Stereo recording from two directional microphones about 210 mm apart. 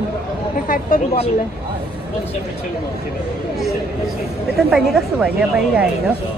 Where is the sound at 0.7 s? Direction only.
40° left (ahead or behind).